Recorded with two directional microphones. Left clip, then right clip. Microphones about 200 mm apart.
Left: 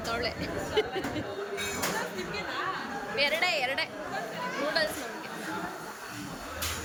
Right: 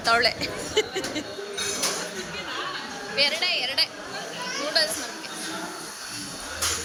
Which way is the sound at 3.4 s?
20° left (ahead or behind).